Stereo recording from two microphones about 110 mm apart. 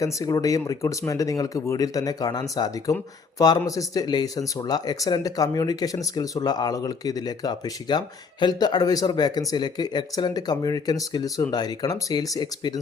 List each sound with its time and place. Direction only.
0.0 s speech: 30° left (ahead or behind)